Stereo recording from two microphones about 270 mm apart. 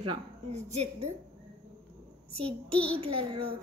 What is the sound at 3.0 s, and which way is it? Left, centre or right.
Speech, right.